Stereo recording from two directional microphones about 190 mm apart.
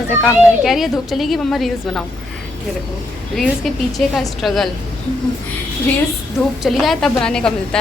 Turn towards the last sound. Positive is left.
turn(degrees=5)  # may be behind; listen again after turning